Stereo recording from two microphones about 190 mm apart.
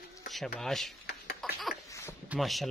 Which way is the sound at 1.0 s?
55° left (ahead or behind).